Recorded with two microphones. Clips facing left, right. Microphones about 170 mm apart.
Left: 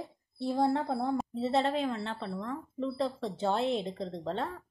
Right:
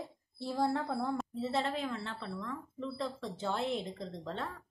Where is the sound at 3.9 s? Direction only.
55° left (ahead or behind).